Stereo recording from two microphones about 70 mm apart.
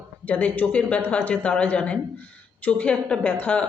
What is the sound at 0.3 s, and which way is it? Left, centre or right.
A man's voice, left.